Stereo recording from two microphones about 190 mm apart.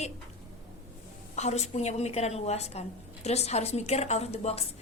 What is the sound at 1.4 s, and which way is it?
A woman's voice, 35° left (ahead or behind).